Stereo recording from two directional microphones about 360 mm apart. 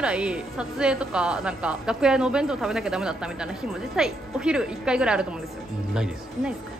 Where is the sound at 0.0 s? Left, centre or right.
Centre.